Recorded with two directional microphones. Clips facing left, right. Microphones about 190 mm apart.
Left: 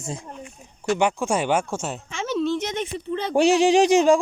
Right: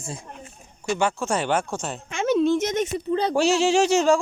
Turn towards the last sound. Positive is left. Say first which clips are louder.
# left 3 dB
turn(degrees=15)  # may be behind; listen again after turning